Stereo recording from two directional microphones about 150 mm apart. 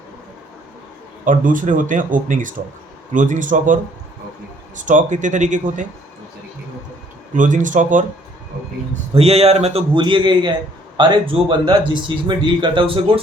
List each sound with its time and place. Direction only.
1.2 s speech: 60° right (ahead or behind)
4.8 s speech: 55° right (ahead or behind)
7.3 s speech: 60° right (ahead or behind)
9.1 s a man's voice: 45° right (ahead or behind)